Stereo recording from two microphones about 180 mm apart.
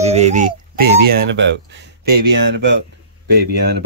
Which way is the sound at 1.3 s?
80° right.